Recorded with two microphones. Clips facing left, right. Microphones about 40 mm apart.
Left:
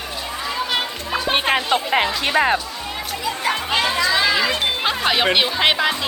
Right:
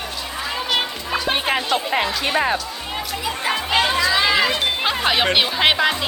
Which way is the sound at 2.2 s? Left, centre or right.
Left.